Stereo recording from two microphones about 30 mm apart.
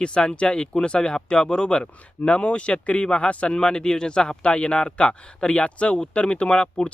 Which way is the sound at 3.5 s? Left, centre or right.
Left.